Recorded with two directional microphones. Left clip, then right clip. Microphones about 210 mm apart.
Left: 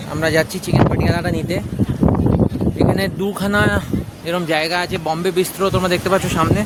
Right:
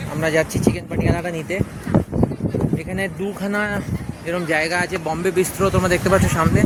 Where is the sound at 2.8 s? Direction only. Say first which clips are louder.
Left 8 dB; 20° left (ahead or behind).